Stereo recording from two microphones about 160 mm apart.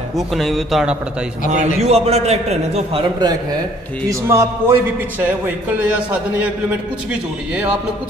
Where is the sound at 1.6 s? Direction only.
40° right (ahead or behind).